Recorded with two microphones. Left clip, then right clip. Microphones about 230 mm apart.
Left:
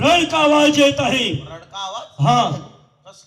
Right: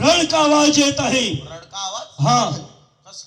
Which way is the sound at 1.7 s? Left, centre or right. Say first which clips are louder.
Even; right.